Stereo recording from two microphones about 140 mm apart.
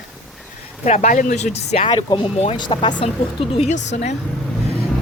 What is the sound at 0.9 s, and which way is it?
Speech, 60° left (ahead or behind).